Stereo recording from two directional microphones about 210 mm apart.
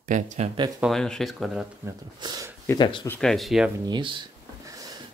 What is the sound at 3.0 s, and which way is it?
Speech, 5° left (ahead or behind).